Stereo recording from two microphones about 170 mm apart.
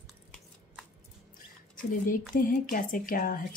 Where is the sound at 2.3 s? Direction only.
55° left (ahead or behind).